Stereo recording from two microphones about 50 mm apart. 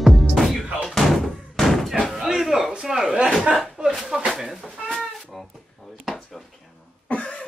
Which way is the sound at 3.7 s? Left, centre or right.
Centre.